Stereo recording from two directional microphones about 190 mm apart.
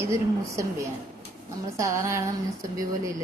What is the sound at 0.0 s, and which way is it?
Speech, 15° right (ahead or behind).